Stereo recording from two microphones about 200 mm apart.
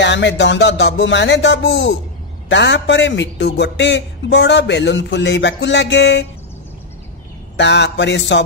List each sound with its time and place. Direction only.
0.0 s a man's voice: 65° left (ahead or behind)
7.5 s a man's voice: 60° left (ahead or behind)